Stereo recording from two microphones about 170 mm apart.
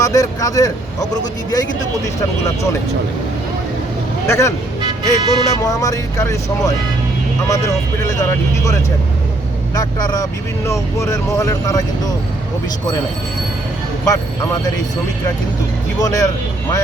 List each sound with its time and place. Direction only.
0.0 s speech: 20° left (ahead or behind)
4.3 s speech: 15° left (ahead or behind)
4.8 s speech: 25° right (ahead or behind)
5.6 s speech: 20° left (ahead or behind)
8.1 s speech: 20° left (ahead or behind)
14.0 s speech: 20° left (ahead or behind)
16.0 s speech: 20° left (ahead or behind)